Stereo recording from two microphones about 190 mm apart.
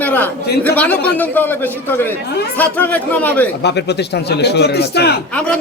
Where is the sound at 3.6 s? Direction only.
60° left (ahead or behind).